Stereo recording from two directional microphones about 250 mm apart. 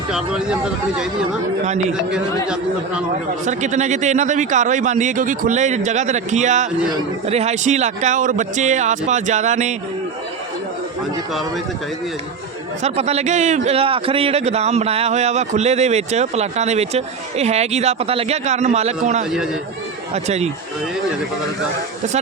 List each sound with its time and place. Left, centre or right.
0.1 s speech: centre
3.4 s a man's voice: right
12.8 s a man's voice: right